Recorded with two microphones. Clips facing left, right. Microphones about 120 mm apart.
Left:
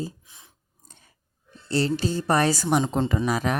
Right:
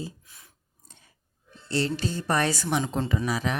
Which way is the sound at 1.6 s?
40° left (ahead or behind).